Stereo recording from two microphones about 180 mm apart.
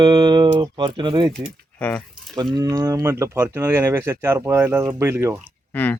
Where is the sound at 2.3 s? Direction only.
20° right (ahead or behind).